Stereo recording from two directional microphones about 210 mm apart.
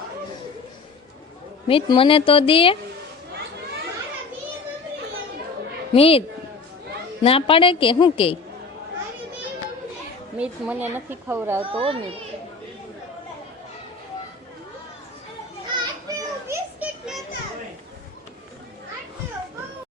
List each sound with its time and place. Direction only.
1.6 s speech: 25° left (ahead or behind)
5.9 s speech: 25° left (ahead or behind)
7.3 s speech: 25° left (ahead or behind)
10.3 s speech: 5° right (ahead or behind)
11.6 s a child's voice: 25° right (ahead or behind)
15.8 s children playing: 15° right (ahead or behind)
16.8 s a sound: centre (ahead or behind)